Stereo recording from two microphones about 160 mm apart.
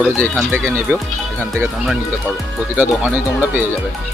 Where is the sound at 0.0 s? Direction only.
10° right (ahead or behind).